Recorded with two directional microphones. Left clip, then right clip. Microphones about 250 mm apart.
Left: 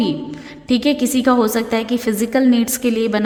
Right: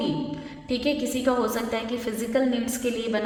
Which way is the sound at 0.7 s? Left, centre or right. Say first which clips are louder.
Left 9 dB; left.